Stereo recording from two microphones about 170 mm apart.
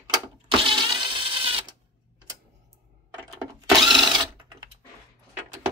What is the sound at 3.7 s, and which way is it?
Mechanisms, centre (ahead or behind).